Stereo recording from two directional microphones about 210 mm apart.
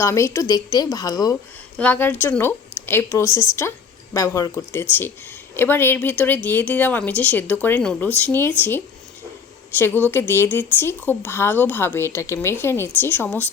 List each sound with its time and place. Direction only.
0.0 s speech: 15° left (ahead or behind)